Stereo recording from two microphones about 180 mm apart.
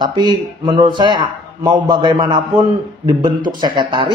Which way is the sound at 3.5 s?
25° right (ahead or behind).